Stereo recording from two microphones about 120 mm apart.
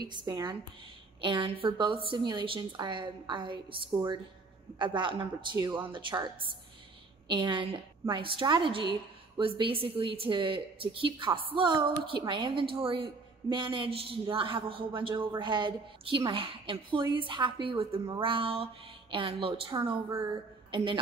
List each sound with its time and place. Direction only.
0.0 s a woman's voice: 35° right (ahead or behind)